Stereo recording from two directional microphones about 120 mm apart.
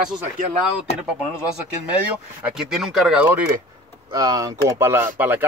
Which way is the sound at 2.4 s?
5° right (ahead or behind).